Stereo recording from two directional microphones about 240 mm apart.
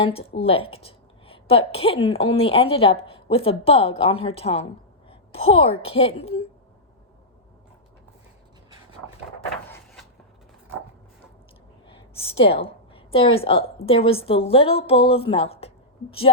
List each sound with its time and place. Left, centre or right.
0.0 s a woman's voice: left
9.6 s cupboard open or close: centre
11.9 s a woman's voice: left